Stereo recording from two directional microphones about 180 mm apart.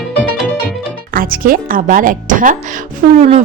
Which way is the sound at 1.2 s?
50° right (ahead or behind).